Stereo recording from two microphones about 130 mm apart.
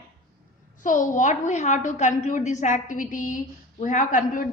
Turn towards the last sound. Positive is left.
turn(degrees=90)